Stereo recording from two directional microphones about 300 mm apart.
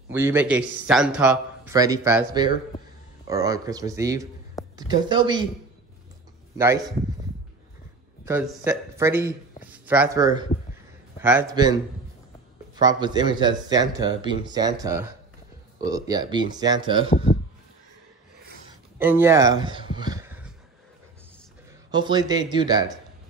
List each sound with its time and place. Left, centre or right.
0.1 s a man's voice: centre
6.5 s speech: centre
8.3 s speech: centre
17.1 s speech: left
18.9 s speech: centre
21.9 s speech: centre